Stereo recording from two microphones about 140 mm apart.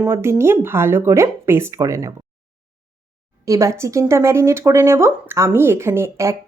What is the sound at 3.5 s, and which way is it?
Speech, 20° right (ahead or behind).